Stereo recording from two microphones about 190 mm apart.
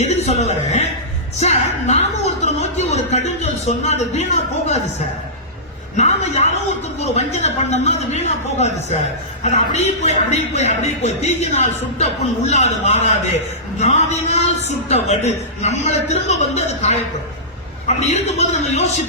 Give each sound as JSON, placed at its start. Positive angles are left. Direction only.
{"t": 0.0, "sound": "a man's voice", "side_deg": 35}
{"t": 1.4, "sound": "a sound", "side_deg": 35}
{"t": 6.0, "sound": "a man's voice", "side_deg": 35}